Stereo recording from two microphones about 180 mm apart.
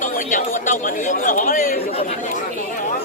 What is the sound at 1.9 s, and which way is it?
Speech, 35° left (ahead or behind).